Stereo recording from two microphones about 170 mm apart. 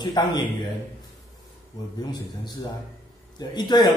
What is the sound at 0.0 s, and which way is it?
Speech, 25° left (ahead or behind).